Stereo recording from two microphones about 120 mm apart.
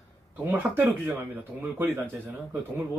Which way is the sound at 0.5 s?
15° right (ahead or behind).